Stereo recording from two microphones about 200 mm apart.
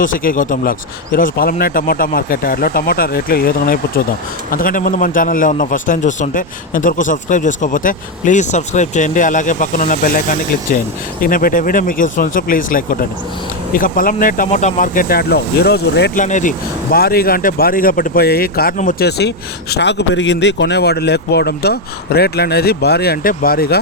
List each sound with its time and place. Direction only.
0.0 s a man's voice: 45° left (ahead or behind)
16.1 s speech: 40° left (ahead or behind)